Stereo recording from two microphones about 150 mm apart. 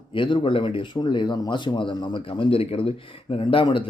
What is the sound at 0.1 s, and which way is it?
Speech, 35° left (ahead or behind).